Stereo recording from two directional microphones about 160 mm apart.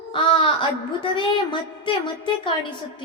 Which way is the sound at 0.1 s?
30° left (ahead or behind).